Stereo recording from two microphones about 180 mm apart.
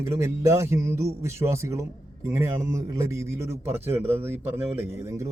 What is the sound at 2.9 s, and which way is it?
A man's voice, 15° right (ahead or behind).